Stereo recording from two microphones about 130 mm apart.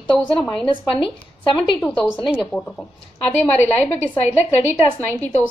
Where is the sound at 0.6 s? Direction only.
40° left (ahead or behind).